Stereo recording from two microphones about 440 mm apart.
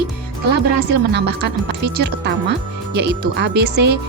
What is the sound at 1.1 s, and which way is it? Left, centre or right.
Speech, right.